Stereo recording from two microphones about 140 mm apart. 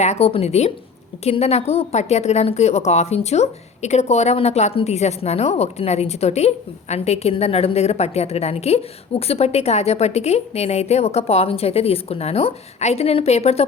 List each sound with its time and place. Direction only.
0.0 s a woman's voice: 50° left (ahead or behind)